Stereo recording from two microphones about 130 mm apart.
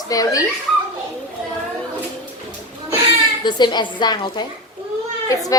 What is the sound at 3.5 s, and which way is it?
A child's voice, 35° left (ahead or behind).